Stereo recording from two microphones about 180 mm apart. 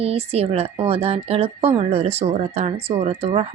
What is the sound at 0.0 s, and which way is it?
A woman's voice, 35° right (ahead or behind).